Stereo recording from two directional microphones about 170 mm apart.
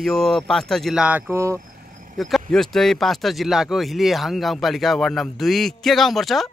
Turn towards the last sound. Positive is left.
turn(degrees=0)  # may be behind; listen again after turning